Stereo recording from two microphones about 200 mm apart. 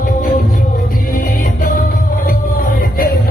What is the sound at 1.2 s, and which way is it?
Music, 40° left (ahead or behind).